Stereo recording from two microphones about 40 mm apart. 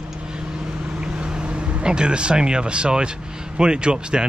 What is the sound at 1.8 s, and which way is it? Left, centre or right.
Speech, right.